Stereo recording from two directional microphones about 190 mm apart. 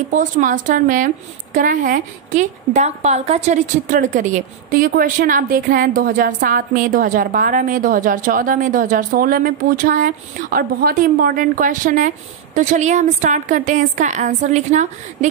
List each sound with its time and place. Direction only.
0.1 s a woman's voice: 45° right (ahead or behind)